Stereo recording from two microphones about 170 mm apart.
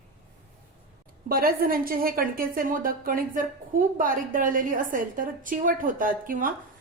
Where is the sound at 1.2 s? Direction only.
60° right (ahead or behind).